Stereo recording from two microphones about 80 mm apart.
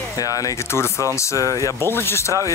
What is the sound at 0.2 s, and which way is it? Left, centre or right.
Speech, left.